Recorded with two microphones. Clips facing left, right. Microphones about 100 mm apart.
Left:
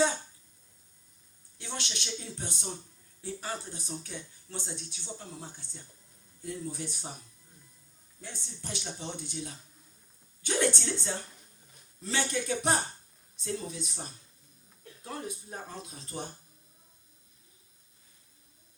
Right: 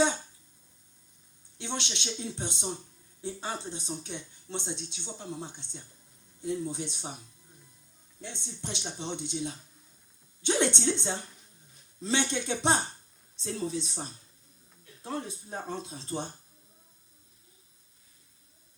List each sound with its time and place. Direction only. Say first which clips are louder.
1.5 s speech: right 4 dB; 20° right (ahead or behind)
8.3 s speech: right 2 dB; 20° right (ahead or behind)
15.0 s speech: right 3 dB; 30° right (ahead or behind)